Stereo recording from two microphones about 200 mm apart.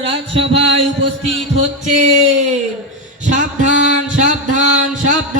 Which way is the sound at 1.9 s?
35° right (ahead or behind).